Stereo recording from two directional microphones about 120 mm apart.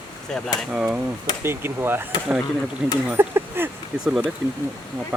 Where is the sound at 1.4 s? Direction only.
20° right (ahead or behind).